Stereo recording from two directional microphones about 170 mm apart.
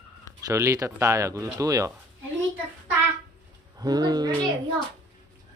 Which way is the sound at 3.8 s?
25° right (ahead or behind).